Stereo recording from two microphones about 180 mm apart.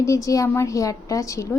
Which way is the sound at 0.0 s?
20° left (ahead or behind).